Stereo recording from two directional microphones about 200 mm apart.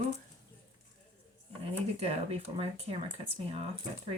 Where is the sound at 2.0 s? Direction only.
30° right (ahead or behind).